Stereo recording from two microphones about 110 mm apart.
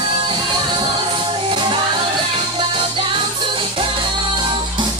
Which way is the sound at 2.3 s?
55° right (ahead or behind).